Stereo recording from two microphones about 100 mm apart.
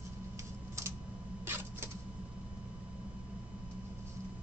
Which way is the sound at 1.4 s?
20° right (ahead or behind).